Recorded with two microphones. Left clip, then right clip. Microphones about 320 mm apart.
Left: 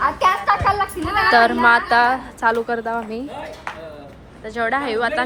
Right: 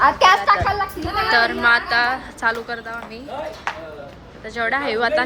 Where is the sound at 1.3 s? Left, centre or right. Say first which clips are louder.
Left 2 dB; centre.